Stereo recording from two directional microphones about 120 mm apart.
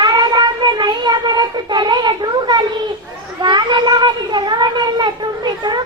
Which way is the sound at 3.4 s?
40° right (ahead or behind).